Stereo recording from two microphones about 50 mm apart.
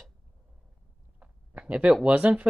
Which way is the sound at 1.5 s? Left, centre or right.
Right.